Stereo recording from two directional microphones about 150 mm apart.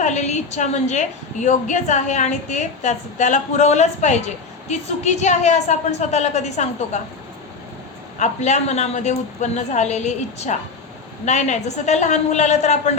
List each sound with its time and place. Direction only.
0.0 s a woman's voice: 50° left (ahead or behind)
8.2 s a woman's voice: 50° left (ahead or behind)